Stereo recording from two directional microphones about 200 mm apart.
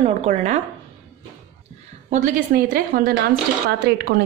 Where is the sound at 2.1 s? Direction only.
40° right (ahead or behind).